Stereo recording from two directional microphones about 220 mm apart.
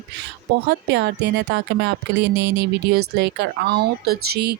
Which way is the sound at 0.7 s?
50° right (ahead or behind).